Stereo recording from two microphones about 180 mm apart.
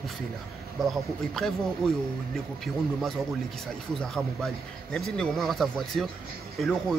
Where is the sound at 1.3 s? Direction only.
Centre (ahead or behind).